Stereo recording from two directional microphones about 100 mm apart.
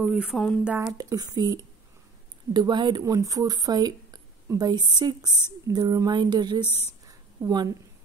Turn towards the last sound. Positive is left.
turn(degrees=-35)  # may be behind; listen again after turning